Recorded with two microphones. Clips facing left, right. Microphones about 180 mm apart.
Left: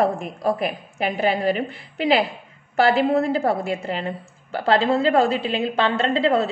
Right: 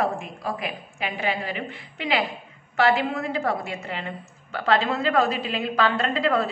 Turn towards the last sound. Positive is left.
turn(degrees=25)  # may be behind; listen again after turning